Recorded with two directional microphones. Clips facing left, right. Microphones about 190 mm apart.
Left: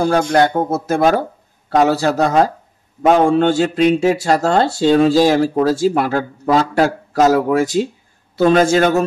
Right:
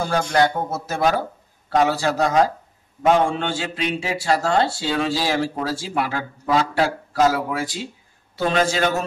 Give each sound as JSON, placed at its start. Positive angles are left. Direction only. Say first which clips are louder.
{"t": 0.0, "sound": "speech", "louder": "left 6 dB", "side_deg": 55}